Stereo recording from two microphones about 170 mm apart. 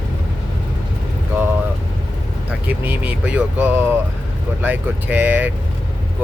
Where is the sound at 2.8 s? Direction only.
10° right (ahead or behind).